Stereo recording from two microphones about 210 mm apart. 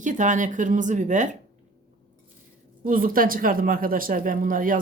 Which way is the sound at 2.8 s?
40° right (ahead or behind).